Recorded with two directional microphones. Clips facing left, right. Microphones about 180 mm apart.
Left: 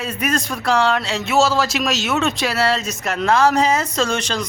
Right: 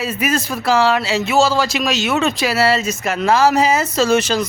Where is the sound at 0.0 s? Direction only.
5° right (ahead or behind).